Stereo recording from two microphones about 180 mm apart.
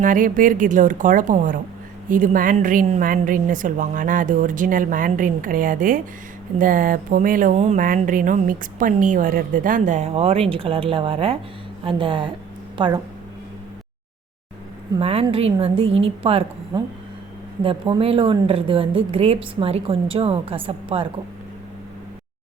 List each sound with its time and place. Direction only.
0.0 s speech: 50° right (ahead or behind); by 13.0 s 25° right (ahead or behind)
14.9 s a woman's voice: 30° right (ahead or behind)
16.7 s a woman's voice: 20° right (ahead or behind)